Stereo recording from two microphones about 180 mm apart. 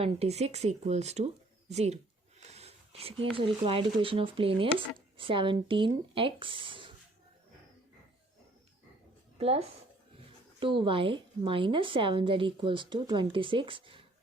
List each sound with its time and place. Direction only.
0.0 s speech: 35° right (ahead or behind)
2.4 s a sound: 35° right (ahead or behind)
3.3 s speech: 30° right (ahead or behind)
9.4 s speech: 35° right (ahead or behind)